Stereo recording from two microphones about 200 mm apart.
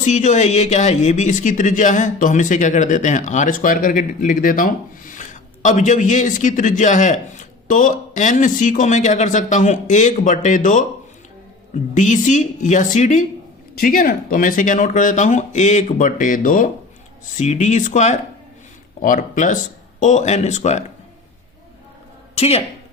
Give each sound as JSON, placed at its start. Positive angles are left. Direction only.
{"t": 0.0, "sound": "speech", "side_deg": 35}
{"t": 11.9, "sound": "speech", "side_deg": 40}
{"t": 22.4, "sound": "speech", "side_deg": 30}